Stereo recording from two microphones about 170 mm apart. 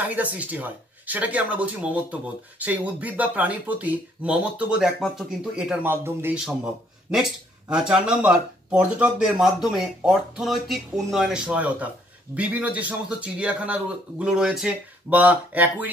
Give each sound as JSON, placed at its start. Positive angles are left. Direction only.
{"t": 0.0, "sound": "a man's voice", "side_deg": -10}